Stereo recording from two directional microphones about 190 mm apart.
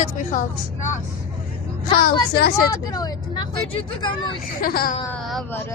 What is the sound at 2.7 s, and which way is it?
Speech, 20° left (ahead or behind).